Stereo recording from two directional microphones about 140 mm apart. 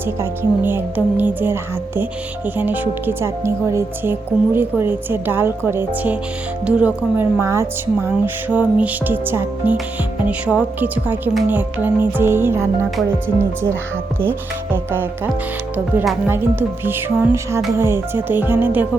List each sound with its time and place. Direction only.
0.2 s speech: 15° right (ahead or behind)
2.6 s speech: 10° right (ahead or behind)